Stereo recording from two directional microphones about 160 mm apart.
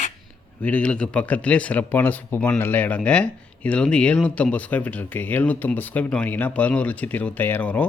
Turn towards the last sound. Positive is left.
turn(degrees=10)  # may be behind; listen again after turning